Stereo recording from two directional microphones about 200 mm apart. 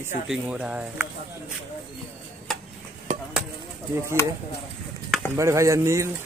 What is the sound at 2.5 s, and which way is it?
Tick-tock, centre (ahead or behind).